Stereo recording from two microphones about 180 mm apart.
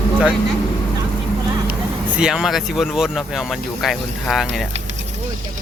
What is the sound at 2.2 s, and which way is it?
Speech, 5° right (ahead or behind).